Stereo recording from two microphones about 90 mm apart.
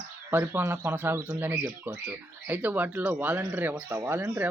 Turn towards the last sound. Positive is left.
turn(degrees=-25)  # may be behind; listen again after turning